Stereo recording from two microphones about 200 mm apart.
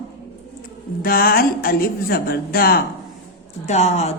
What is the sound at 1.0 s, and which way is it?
A woman's voice, 50° left (ahead or behind).